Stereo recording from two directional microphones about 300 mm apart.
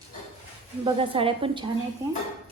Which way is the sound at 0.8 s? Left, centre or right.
Centre.